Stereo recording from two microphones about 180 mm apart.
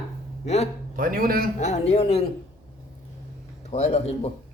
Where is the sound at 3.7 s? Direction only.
35° left (ahead or behind).